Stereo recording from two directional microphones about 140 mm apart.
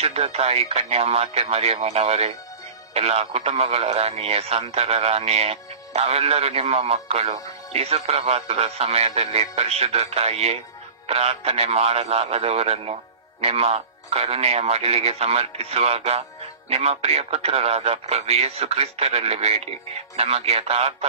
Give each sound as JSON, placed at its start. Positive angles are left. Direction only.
{"t": 0.0, "sound": "speech", "side_deg": -50}